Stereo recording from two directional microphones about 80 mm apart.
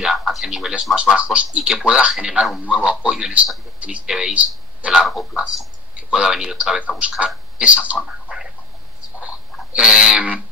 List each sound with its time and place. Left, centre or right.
0.0 s a man's voice: centre
8.0 s a sound: centre
9.8 s a man's voice: centre